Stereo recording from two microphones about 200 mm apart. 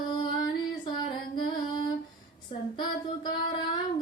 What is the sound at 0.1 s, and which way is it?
Female singing, 20° left (ahead or behind).